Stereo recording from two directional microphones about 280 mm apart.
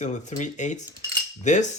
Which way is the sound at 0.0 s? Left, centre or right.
Left.